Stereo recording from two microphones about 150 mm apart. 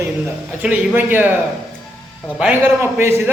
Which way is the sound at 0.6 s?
10° right (ahead or behind).